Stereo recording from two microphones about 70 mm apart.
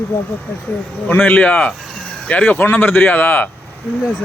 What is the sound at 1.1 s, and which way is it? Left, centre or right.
Speech, left.